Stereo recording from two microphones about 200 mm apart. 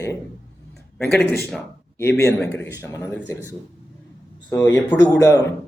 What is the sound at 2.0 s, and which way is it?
A man's voice, 15° left (ahead or behind).